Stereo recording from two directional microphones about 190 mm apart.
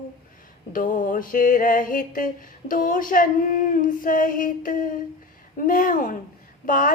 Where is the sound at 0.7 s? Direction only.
45° left (ahead or behind).